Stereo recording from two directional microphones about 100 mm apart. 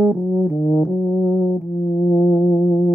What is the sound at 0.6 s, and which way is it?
Brass instrument, 15° right (ahead or behind).